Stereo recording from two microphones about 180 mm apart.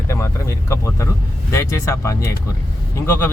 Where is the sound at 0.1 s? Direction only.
15° left (ahead or behind).